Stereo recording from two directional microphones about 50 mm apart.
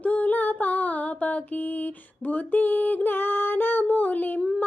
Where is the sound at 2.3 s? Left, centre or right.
Left.